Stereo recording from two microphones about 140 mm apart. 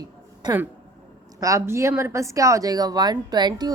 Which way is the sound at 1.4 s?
20° right (ahead or behind).